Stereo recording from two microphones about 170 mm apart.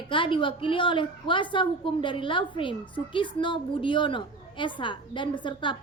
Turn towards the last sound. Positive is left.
turn(degrees=30)  # may be behind; listen again after turning